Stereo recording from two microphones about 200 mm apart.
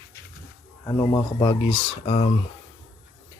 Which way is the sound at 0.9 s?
20° left (ahead or behind).